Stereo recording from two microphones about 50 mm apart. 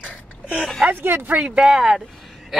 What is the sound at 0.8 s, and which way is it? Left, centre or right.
Speech, right.